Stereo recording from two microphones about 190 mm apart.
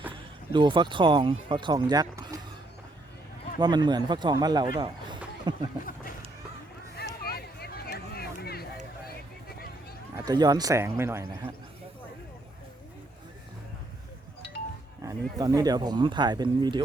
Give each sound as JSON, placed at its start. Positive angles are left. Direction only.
{"t": 0.5, "sound": "speech", "side_deg": -25}
{"t": 3.6, "sound": "speech", "side_deg": -20}
{"t": 6.9, "sound": "a sound", "side_deg": 55}
{"t": 10.2, "sound": "a man's voice", "side_deg": -20}
{"t": 15.0, "sound": "speech", "side_deg": -20}